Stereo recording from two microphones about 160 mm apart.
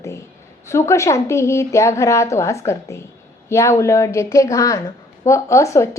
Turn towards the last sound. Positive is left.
turn(degrees=20)  # may be behind; listen again after turning